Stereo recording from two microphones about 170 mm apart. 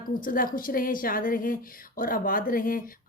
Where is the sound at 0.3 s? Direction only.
55° left (ahead or behind).